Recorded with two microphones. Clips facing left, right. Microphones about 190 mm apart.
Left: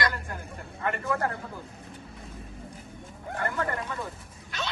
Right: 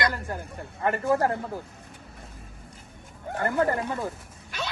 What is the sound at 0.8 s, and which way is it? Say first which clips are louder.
Speech: right 5 dB; 30° right (ahead or behind).